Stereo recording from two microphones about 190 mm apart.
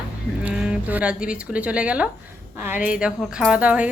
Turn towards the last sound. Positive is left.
turn(degrees=-5)  # may be behind; listen again after turning